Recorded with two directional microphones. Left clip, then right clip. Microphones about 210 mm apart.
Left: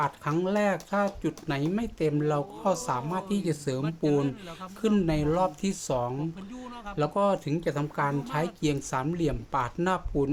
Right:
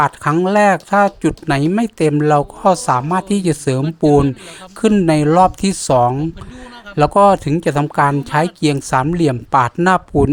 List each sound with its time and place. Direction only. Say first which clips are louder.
0.0 s speech: right 13 dB; 45° right (ahead or behind)